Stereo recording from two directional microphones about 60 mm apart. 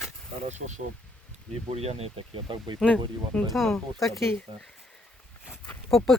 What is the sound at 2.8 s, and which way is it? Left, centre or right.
Speech, centre.